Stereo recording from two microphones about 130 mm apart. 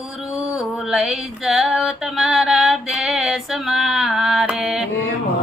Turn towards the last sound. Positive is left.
turn(degrees=-5)  # may be behind; listen again after turning